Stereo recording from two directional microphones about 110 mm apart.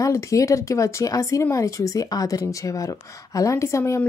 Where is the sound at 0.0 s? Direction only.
30° left (ahead or behind).